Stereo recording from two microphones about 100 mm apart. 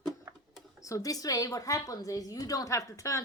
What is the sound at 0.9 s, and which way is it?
A woman's voice, 35° left (ahead or behind).